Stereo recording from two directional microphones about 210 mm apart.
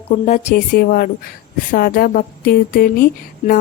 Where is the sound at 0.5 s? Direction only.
45° left (ahead or behind).